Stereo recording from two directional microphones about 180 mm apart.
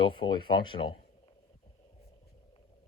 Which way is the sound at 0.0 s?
25° left (ahead or behind).